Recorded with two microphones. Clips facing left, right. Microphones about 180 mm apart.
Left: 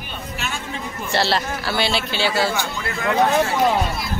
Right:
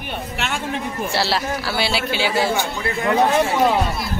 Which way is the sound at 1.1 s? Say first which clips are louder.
Left 2 dB; 5° right (ahead or behind).